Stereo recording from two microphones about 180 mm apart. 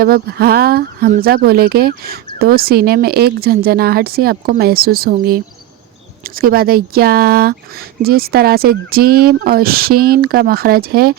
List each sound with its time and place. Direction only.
0.0 s speech: 55° right (ahead or behind)